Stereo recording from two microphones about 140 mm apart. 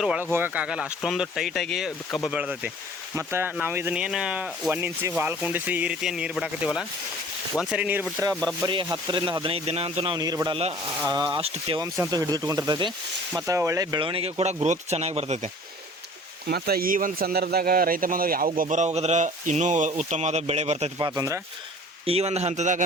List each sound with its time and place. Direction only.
0.3 s speech: 15° right (ahead or behind)
4.7 s speech: 15° right (ahead or behind)
8.3 s speech: 5° left (ahead or behind)
8.6 s speech: 30° right (ahead or behind)
10.2 s speech: 25° right (ahead or behind)
10.5 s speech: 45° right (ahead or behind)
11.8 s speech: 25° right (ahead or behind)
14.0 s speech: 40° right (ahead or behind)
16.6 s speech: 90° right; by 20.9 s 50° right (ahead or behind)
21.0 s speech: 20° right (ahead or behind)
22.0 s speech: 45° right (ahead or behind)